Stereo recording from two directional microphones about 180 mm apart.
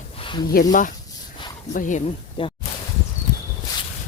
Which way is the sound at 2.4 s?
30° left (ahead or behind).